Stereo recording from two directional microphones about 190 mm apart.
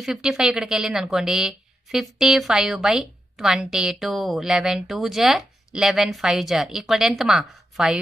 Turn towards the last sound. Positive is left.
turn(degrees=0)  # may be behind; listen again after turning